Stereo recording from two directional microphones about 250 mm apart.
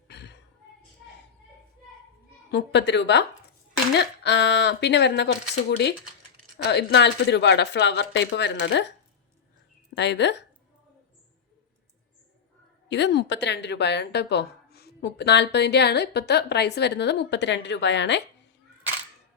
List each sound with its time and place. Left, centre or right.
0.1 s a sound: left
2.5 s a woman's voice: left
9.9 s a woman's voice: left
12.9 s a woman's voice: left